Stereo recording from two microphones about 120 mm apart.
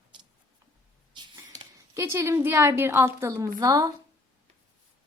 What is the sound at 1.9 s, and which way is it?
A woman's voice, 25° right (ahead or behind).